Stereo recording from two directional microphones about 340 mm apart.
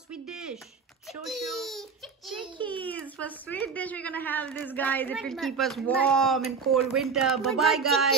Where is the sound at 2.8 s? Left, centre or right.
Centre.